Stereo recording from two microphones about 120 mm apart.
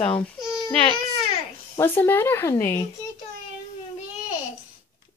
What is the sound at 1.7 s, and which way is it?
Speech, 20° left (ahead or behind).